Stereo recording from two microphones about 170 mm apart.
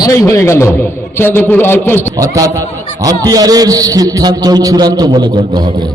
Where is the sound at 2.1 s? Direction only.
20° right (ahead or behind).